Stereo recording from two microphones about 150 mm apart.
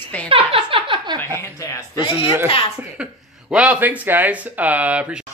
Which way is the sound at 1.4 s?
20° left (ahead or behind).